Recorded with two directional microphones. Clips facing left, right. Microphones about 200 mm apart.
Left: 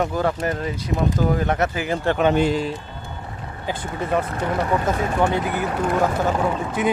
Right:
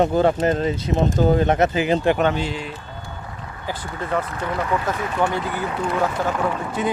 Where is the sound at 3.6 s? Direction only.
20° left (ahead or behind).